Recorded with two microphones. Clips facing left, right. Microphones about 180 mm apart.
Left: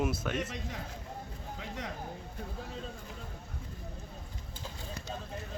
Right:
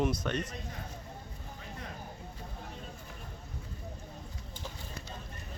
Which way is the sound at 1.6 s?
90° left.